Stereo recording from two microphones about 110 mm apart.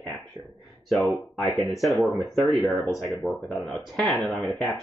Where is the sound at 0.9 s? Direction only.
Centre (ahead or behind).